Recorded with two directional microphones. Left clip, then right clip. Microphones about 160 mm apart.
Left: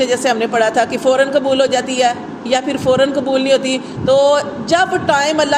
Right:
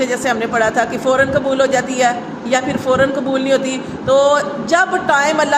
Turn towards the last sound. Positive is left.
turn(degrees=35)  # may be behind; listen again after turning